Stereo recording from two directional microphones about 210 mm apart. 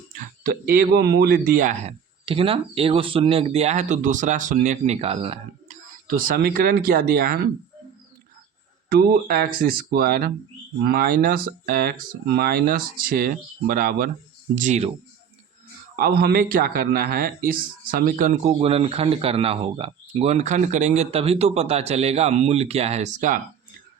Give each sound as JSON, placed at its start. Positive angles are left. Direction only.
{"t": 0.1, "sound": "speech", "side_deg": -45}
{"t": 6.1, "sound": "speech", "side_deg": -45}
{"t": 8.9, "sound": "speech", "side_deg": -45}
{"t": 16.0, "sound": "speech", "side_deg": -45}
{"t": 18.6, "sound": "speech", "side_deg": -30}